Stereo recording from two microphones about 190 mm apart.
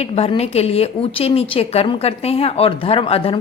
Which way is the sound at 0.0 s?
30° left (ahead or behind).